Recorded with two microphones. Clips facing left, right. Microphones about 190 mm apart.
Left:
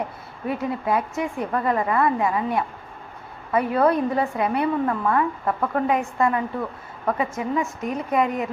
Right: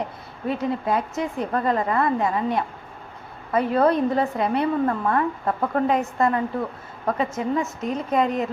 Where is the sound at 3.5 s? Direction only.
25° right (ahead or behind).